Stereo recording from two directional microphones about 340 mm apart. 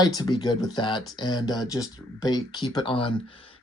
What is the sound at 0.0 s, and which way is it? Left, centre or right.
Speech, centre.